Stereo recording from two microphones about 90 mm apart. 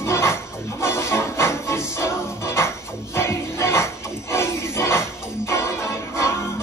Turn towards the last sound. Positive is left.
turn(degrees=30)  # may be behind; listen again after turning